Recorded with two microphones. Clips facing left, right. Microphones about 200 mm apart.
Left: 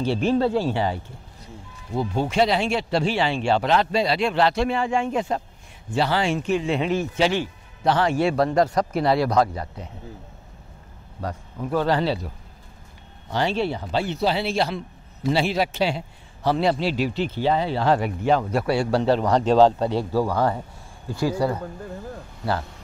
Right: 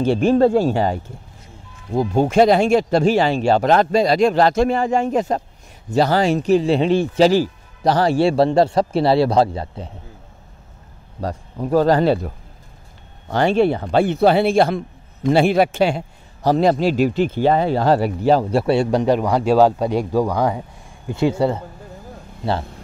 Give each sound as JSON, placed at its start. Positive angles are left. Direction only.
{"t": 0.0, "sound": "speech", "side_deg": -50}
{"t": 11.1, "sound": "speech", "side_deg": -40}
{"t": 13.3, "sound": "speech", "side_deg": -50}